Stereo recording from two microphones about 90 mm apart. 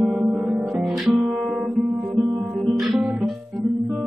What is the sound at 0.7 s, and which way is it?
Guitar, centre (ahead or behind).